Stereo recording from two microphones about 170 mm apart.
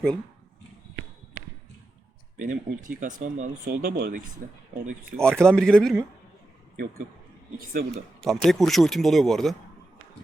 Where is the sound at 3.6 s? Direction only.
60° right (ahead or behind).